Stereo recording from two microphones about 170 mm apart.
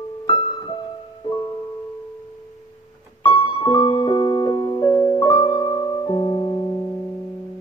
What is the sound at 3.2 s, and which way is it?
Piano, 30° left (ahead or behind).